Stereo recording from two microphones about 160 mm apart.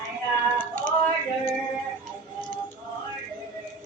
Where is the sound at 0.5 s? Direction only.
10° left (ahead or behind).